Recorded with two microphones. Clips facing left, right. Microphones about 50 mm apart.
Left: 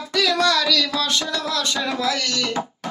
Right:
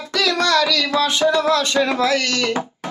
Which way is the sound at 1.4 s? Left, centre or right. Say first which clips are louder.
Right 7 dB; right.